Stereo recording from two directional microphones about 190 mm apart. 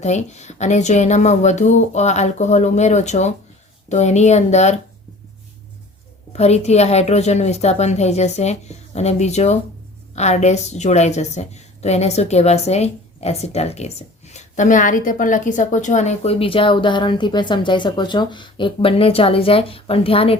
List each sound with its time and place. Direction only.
0.0 s a woman's voice: 35° left (ahead or behind)
6.3 s a woman's voice: 35° left (ahead or behind)